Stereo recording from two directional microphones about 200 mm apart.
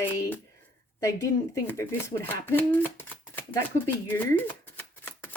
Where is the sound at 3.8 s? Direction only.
10° left (ahead or behind).